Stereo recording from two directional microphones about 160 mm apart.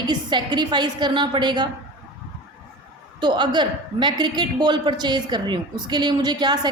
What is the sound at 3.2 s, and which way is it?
A man's voice, 30° right (ahead or behind).